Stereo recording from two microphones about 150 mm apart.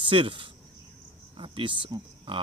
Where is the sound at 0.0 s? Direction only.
35° right (ahead or behind).